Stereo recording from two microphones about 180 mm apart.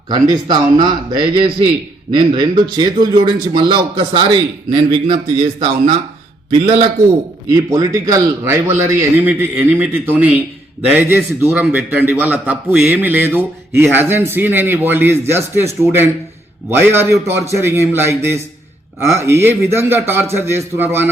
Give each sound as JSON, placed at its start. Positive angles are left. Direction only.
{"t": 0.1, "sound": "a man's voice", "side_deg": -25}